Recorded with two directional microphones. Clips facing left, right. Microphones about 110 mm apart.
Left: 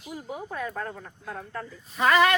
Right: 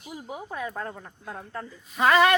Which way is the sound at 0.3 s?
10° right (ahead or behind).